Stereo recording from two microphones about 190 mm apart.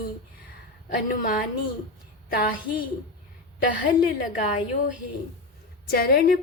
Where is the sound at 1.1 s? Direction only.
45° left (ahead or behind).